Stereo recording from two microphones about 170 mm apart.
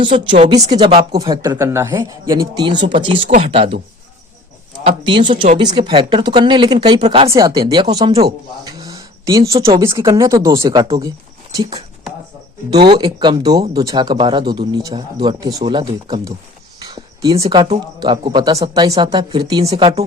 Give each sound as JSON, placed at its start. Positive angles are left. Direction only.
{"t": 0.0, "sound": "speech", "side_deg": -30}
{"t": 1.4, "sound": "speech", "side_deg": -20}
{"t": 4.9, "sound": "speech", "side_deg": -30}
{"t": 7.3, "sound": "speech", "side_deg": -20}
{"t": 7.9, "sound": "speech", "side_deg": -40}
{"t": 11.5, "sound": "speech", "side_deg": -30}
{"t": 17.3, "sound": "speech", "side_deg": -35}